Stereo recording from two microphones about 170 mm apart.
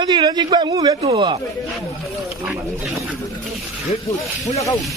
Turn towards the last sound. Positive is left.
turn(degrees=20)  # may be behind; listen again after turning